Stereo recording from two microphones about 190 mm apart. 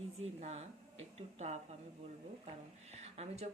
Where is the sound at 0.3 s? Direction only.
35° right (ahead or behind).